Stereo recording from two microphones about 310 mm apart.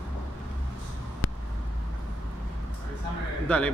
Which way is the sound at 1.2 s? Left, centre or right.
Left.